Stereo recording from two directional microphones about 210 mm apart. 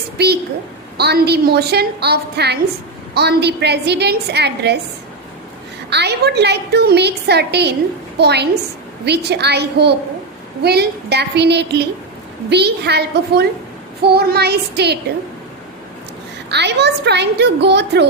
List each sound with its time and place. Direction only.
0.2 s a woman's voice: 50° right (ahead or behind)
5.9 s a woman's voice: 50° right (ahead or behind)
16.5 s a woman's voice: 55° right (ahead or behind)